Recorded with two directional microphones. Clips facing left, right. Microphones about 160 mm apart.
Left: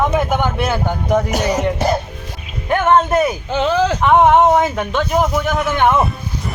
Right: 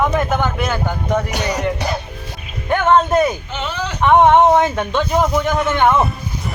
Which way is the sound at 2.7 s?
5° left (ahead or behind).